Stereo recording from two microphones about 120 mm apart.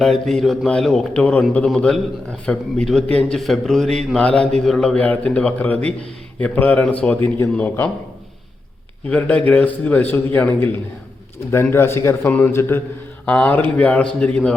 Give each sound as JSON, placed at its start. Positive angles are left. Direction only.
{"t": 0.0, "sound": "a man's voice", "side_deg": 0}
{"t": 9.0, "sound": "a man's voice", "side_deg": 10}